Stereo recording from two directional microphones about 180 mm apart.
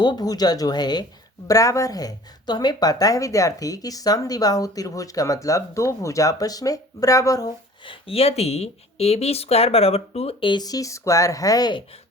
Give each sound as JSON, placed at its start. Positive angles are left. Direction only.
{"t": 0.0, "sound": "speech", "side_deg": 25}